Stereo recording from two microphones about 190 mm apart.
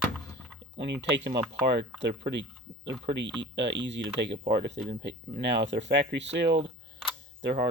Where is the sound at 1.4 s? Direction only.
65° right (ahead or behind).